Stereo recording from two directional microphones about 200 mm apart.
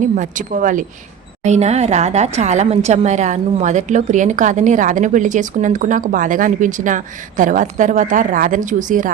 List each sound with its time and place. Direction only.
0.2 s a woman's voice: 40° right (ahead or behind)